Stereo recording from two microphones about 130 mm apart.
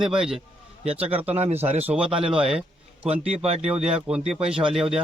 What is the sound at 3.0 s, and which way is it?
Speech, 50° right (ahead or behind).